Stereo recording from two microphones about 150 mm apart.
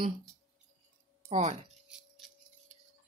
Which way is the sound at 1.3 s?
50° right (ahead or behind).